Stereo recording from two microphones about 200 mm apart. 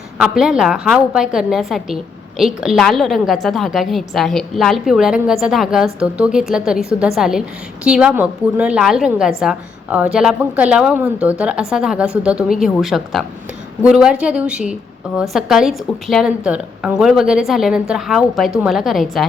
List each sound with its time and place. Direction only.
0.2 s a woman's voice: 5° right (ahead or behind)